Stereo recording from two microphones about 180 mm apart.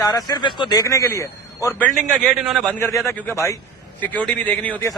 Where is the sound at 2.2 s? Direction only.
Centre (ahead or behind).